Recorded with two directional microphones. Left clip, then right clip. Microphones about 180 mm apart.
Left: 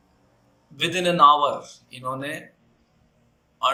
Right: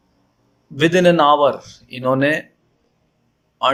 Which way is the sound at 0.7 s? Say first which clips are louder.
Right 7 dB; 45° right (ahead or behind).